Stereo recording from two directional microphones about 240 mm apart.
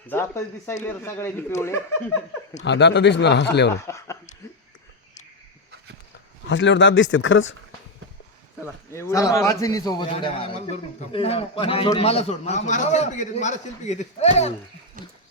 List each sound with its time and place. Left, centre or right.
0.1 s speech: centre
2.6 s speech: left
3.8 s speech: centre
6.5 s speech: left
8.9 s a man's voice: centre; by 14.3 s left
15.0 s dog: right